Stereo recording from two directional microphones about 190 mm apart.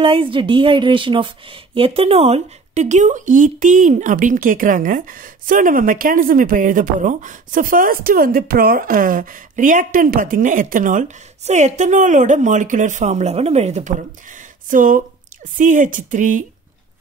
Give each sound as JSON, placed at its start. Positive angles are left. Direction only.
{"t": 0.0, "sound": "a woman's voice", "side_deg": -30}